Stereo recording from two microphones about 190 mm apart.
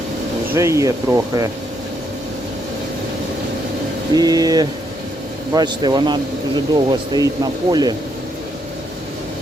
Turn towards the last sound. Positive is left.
turn(degrees=-20)  # may be behind; listen again after turning